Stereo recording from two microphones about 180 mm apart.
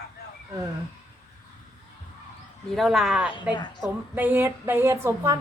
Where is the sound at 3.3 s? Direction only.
25° left (ahead or behind).